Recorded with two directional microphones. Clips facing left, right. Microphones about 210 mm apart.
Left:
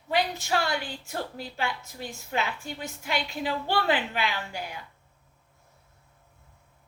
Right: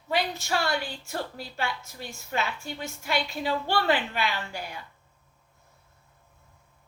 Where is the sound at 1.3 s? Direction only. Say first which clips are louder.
Left 1 dB; 15° left (ahead or behind).